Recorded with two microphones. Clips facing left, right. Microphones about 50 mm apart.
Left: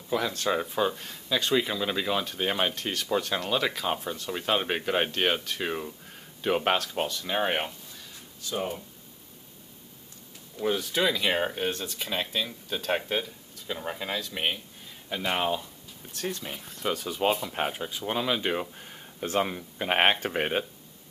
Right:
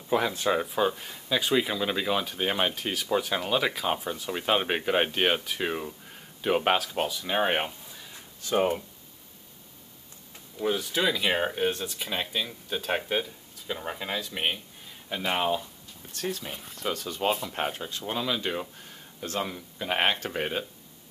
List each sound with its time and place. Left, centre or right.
0.1 s speech: centre
8.5 s speech: right
10.6 s speech: centre; by 20.6 s left